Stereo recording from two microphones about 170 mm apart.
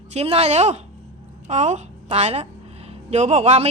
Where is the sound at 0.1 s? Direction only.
40° right (ahead or behind).